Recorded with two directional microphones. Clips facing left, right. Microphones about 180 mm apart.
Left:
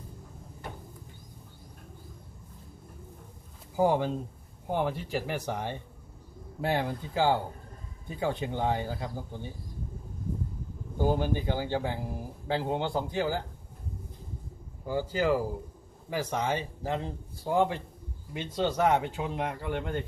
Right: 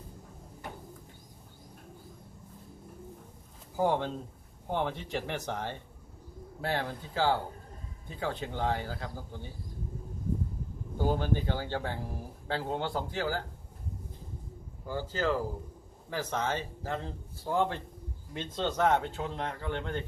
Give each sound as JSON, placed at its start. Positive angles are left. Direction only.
{"t": 3.8, "sound": "speech", "side_deg": 10}
{"t": 10.9, "sound": "speech", "side_deg": 15}
{"t": 14.8, "sound": "speech", "side_deg": 15}